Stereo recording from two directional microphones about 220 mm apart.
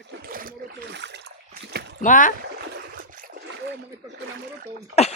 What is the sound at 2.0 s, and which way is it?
Speech, 35° left (ahead or behind).